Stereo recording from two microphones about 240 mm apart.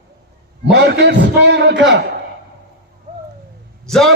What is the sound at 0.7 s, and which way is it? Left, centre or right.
Music, right.